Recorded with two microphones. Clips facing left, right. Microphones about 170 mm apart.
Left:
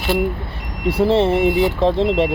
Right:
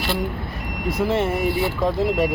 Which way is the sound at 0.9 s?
30° left (ahead or behind).